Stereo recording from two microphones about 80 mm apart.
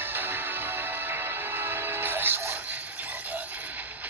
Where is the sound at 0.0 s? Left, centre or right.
Right.